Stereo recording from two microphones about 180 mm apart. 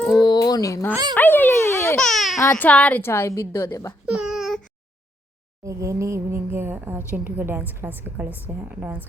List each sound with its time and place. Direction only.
0.1 s speech: 20° left (ahead or behind)
0.9 s a woman's voice: 20° right (ahead or behind)
1.1 s a woman's voice: 10° left (ahead or behind)
2.0 s speech: centre (ahead or behind)
2.4 s a woman's voice: 10° left (ahead or behind)
4.0 s baby cry: 5° right (ahead or behind)
5.6 s a woman's voice: 15° right (ahead or behind)